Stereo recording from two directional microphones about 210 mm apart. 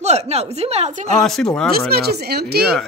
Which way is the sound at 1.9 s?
50° right (ahead or behind).